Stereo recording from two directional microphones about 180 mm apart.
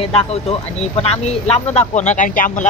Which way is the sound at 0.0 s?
35° left (ahead or behind).